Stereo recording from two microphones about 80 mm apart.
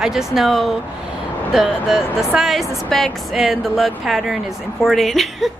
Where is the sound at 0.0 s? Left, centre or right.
Centre.